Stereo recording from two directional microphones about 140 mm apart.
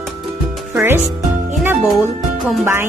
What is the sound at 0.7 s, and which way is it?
Music, 15° right (ahead or behind).